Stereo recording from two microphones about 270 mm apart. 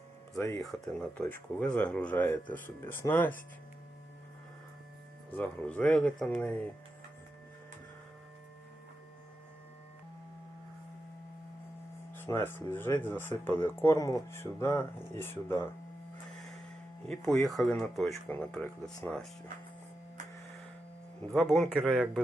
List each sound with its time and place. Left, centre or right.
0.3 s speech: centre
5.3 s speech: centre
12.1 s speech: centre
17.1 s speech: centre
21.3 s speech: centre